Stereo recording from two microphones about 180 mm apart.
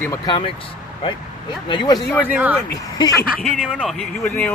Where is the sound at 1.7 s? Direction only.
25° left (ahead or behind).